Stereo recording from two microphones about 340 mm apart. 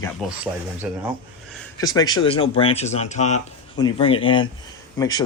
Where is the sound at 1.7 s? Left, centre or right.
Centre.